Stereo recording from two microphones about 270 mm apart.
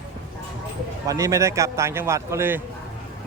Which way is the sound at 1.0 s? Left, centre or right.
Centre.